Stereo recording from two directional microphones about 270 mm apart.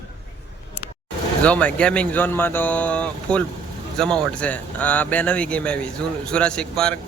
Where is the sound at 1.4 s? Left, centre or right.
Centre.